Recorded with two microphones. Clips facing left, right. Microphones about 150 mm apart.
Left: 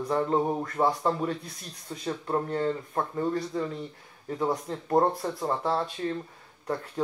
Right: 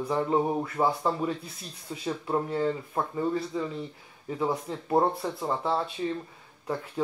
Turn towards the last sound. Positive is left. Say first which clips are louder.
# even
turn(degrees=0)  # may be behind; listen again after turning